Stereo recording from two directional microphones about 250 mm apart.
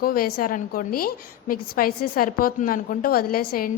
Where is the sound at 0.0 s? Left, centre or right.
Left.